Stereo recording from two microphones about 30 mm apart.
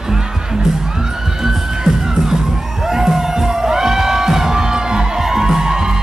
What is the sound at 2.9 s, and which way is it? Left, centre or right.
Music, centre.